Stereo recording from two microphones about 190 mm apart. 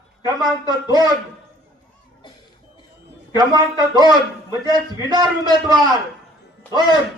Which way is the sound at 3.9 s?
20° right (ahead or behind).